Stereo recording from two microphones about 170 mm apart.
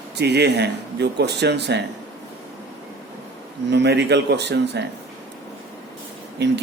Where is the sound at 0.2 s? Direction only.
75° right (ahead or behind).